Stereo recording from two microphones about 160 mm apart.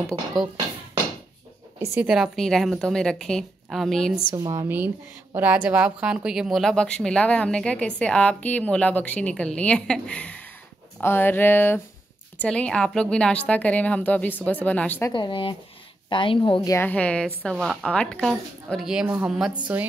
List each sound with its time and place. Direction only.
2.0 s speech: 5° right (ahead or behind)
4.3 s speech: 25° right (ahead or behind)
4.6 s a woman's voice: 10° right (ahead or behind); by 15.1 s 15° left (ahead or behind)
15.1 s a woman's voice: 30° left (ahead or behind)
16.7 s speech: 10° left (ahead or behind)